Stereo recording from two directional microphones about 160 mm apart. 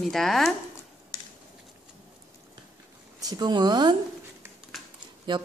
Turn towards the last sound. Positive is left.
turn(degrees=-30)  # may be behind; listen again after turning